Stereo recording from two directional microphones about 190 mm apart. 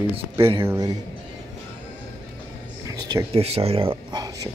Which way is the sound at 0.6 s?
15° right (ahead or behind).